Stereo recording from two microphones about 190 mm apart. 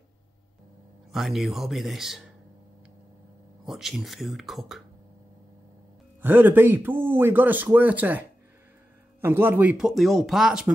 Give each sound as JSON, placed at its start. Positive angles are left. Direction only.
{"t": 1.1, "sound": "speech", "side_deg": 0}
{"t": 3.6, "sound": "speech", "side_deg": 0}
{"t": 6.2, "sound": "a man's voice", "side_deg": -10}